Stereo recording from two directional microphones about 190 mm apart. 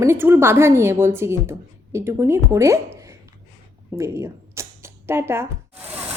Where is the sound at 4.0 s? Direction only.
15° right (ahead or behind).